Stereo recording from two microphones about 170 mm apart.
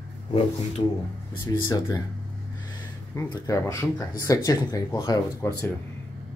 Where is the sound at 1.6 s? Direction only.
25° left (ahead or behind).